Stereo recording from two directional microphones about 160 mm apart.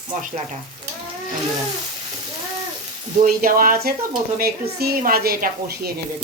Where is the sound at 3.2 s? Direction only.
65° right (ahead or behind).